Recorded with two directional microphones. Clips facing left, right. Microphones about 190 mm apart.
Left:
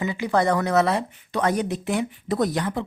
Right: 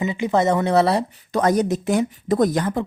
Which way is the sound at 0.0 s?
20° right (ahead or behind).